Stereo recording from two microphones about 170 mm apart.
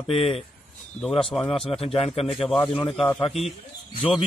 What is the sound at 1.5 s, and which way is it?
A man's voice, 35° left (ahead or behind).